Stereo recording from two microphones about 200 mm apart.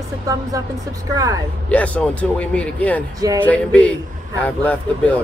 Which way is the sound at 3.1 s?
20° right (ahead or behind).